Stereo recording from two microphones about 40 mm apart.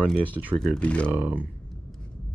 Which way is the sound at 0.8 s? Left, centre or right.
Left.